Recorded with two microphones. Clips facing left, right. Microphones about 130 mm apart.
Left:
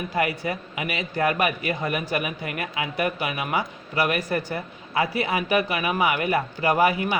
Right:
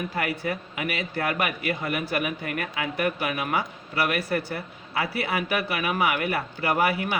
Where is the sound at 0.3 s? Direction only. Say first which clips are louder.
Left 1 dB; 20° left (ahead or behind).